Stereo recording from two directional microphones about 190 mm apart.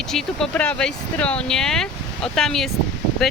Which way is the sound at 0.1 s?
Centre (ahead or behind).